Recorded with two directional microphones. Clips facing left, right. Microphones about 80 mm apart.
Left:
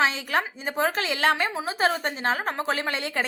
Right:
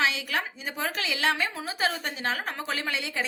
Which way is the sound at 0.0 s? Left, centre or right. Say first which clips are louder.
Left 4 dB; left.